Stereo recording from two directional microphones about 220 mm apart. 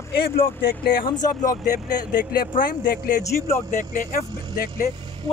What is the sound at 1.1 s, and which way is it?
Speech, 20° left (ahead or behind).